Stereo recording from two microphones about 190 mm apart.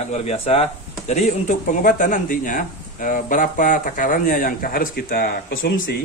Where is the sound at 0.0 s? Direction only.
35° left (ahead or behind).